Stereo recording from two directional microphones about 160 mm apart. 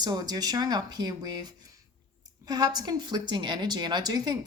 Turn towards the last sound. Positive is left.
turn(degrees=-25)  # may be behind; listen again after turning